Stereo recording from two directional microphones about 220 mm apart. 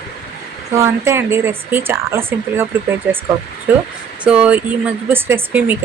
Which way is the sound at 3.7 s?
10° right (ahead or behind).